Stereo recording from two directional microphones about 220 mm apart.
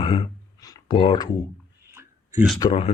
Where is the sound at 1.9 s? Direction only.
10° right (ahead or behind).